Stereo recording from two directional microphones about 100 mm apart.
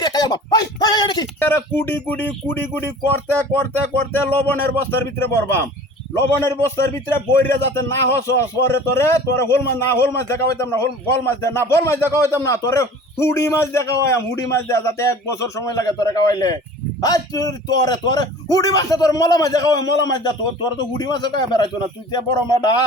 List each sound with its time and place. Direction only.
0.0 s speech: 45° left (ahead or behind)
1.4 s a man's voice: 20° left (ahead or behind); by 22.8 s 45° left (ahead or behind)